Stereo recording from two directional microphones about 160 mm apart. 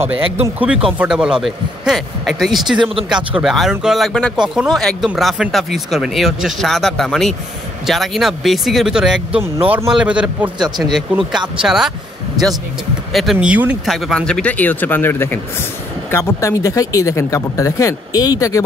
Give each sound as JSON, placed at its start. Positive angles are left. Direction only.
{"t": 0.6, "sound": "speech", "side_deg": -5}
{"t": 13.1, "sound": "speech", "side_deg": 0}
{"t": 13.9, "sound": "speech", "side_deg": 5}